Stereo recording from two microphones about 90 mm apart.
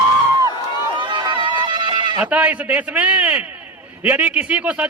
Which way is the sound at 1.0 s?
60° right (ahead or behind).